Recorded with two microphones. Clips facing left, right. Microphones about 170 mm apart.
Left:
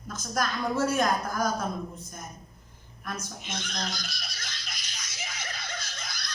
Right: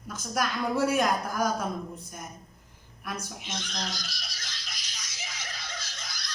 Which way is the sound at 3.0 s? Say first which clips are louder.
Even; 10° right (ahead or behind).